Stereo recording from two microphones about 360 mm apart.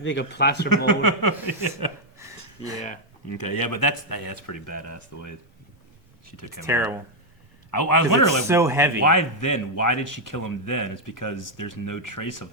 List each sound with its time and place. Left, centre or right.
0.0 s speech: left
0.9 s speech: left
3.3 s a man's voice: left
6.7 s speech: centre
7.7 s speech: left
8.4 s speech: centre
9.0 s a man's voice: left